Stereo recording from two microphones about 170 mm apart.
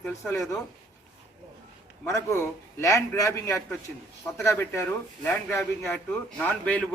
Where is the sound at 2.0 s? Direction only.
15° left (ahead or behind).